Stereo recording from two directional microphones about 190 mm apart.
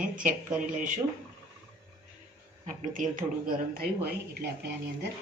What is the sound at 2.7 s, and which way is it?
Speech, 45° right (ahead or behind).